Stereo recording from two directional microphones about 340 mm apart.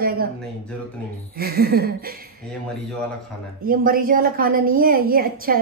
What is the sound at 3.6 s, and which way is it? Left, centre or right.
Speech, right.